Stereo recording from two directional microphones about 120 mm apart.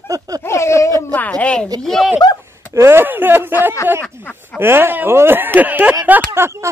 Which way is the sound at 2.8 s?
20° right (ahead or behind).